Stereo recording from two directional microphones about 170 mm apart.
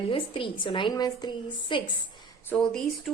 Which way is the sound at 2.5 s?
5° left (ahead or behind).